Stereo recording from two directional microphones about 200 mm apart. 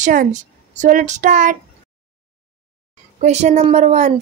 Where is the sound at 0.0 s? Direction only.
40° right (ahead or behind).